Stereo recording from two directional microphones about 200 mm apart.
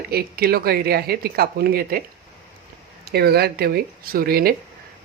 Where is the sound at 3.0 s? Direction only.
50° right (ahead or behind).